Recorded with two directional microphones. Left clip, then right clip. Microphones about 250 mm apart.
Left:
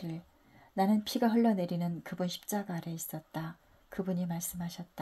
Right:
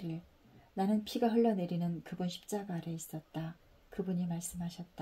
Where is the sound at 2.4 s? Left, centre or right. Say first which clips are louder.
Left 2 dB; left.